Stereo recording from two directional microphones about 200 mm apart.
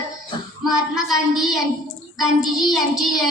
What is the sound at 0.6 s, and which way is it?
A woman's voice, centre (ahead or behind).